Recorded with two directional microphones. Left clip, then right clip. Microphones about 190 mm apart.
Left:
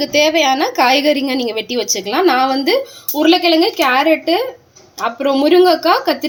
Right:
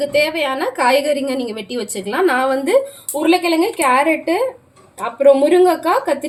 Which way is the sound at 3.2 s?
30° left (ahead or behind).